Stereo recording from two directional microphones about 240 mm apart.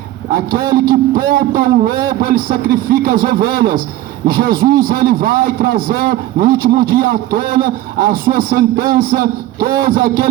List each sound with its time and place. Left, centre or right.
0.3 s a man's voice: right